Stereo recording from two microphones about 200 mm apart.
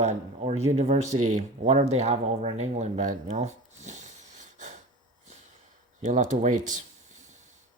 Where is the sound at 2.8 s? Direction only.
35° right (ahead or behind).